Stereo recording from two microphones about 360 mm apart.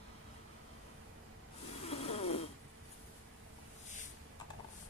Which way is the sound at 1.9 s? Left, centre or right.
Centre.